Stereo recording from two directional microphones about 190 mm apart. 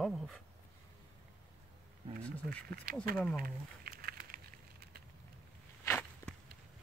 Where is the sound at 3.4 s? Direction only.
50° right (ahead or behind).